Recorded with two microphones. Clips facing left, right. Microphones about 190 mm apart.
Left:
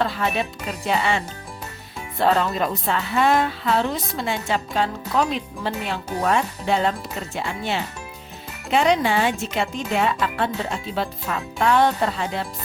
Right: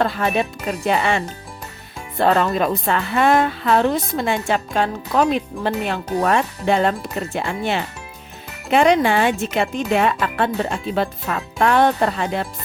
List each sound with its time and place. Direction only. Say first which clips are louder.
0.0 s a woman's voice: right 4 dB; 50° right (ahead or behind)